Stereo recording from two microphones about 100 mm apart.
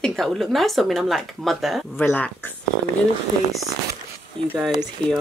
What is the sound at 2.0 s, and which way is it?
Speech, 15° left (ahead or behind).